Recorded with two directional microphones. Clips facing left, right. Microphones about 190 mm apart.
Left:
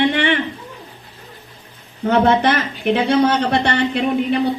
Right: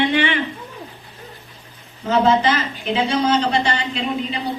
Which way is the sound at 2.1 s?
60° left (ahead or behind).